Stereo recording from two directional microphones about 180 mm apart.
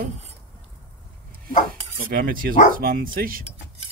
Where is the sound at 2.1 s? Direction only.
55° right (ahead or behind).